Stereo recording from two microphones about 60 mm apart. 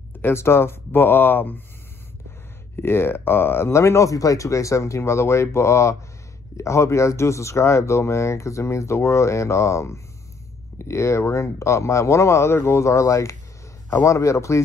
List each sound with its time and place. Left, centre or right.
0.2 s speech: left
2.7 s a man's voice: left